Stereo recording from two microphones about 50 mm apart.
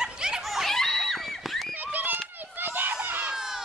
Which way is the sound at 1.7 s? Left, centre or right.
Right.